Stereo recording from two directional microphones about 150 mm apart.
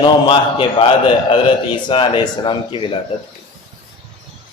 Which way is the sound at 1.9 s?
35° left (ahead or behind).